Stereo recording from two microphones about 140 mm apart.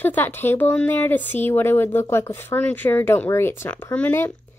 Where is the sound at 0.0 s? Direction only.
15° left (ahead or behind).